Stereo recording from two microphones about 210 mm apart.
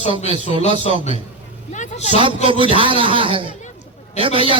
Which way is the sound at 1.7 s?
35° left (ahead or behind).